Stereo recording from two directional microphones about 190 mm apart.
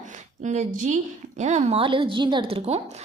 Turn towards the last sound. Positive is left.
turn(degrees=-35)  # may be behind; listen again after turning